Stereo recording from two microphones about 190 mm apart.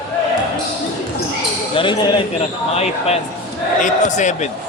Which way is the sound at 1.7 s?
25° left (ahead or behind).